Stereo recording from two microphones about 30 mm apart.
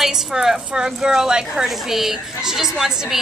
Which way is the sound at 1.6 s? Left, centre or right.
Centre.